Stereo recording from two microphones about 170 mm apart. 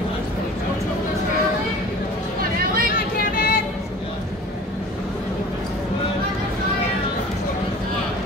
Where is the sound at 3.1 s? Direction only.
60° left (ahead or behind).